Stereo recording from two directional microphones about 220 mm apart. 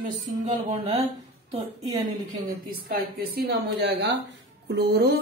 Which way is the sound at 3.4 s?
45° right (ahead or behind).